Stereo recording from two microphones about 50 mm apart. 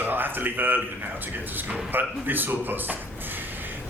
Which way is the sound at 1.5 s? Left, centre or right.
Right.